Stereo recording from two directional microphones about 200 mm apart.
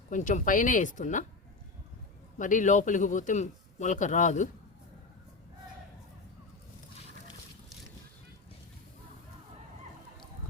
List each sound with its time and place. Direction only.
0.1 s a man's voice: 40° left (ahead or behind)
2.4 s a man's voice: 40° left (ahead or behind)